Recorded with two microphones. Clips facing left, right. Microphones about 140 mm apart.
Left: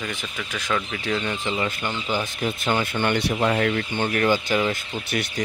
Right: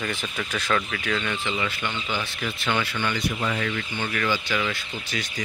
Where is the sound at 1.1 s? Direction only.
25° left (ahead or behind).